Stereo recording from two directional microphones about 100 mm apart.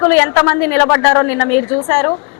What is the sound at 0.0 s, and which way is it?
A woman's voice, 25° left (ahead or behind).